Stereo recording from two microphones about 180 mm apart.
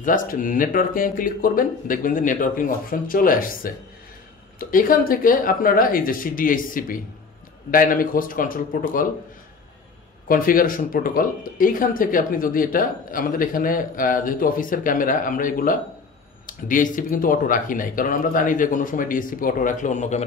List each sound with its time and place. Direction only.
0.0 s speech: 50° left (ahead or behind)
10.2 s speech: 50° left (ahead or behind)